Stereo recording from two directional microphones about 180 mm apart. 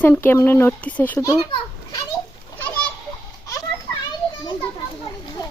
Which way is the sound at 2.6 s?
5° left (ahead or behind).